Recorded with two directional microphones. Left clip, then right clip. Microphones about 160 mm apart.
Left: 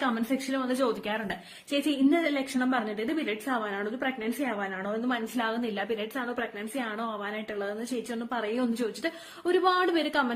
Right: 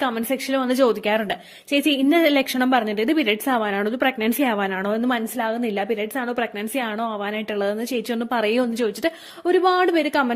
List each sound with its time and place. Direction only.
0.0 s a woman's voice: 55° right (ahead or behind)
5.4 s a woman's voice: 40° right (ahead or behind)
6.4 s a woman's voice: 60° right (ahead or behind)